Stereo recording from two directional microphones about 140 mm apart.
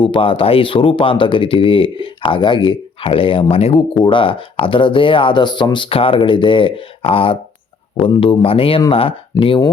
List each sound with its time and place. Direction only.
0.0 s speech: 35° left (ahead or behind)
9.3 s speech: 25° left (ahead or behind)